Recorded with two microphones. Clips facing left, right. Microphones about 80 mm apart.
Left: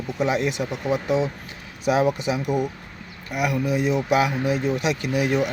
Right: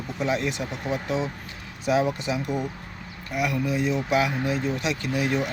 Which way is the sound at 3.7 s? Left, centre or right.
Left.